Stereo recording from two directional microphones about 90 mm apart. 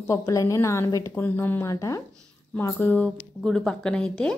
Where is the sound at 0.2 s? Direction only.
40° left (ahead or behind).